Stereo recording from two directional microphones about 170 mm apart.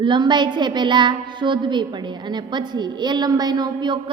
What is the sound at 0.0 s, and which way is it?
A woman's voice, 25° right (ahead or behind).